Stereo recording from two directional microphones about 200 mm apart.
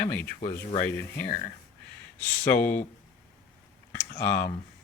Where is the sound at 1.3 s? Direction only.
40° left (ahead or behind).